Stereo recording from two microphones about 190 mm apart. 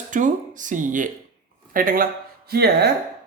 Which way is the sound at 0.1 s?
40° right (ahead or behind).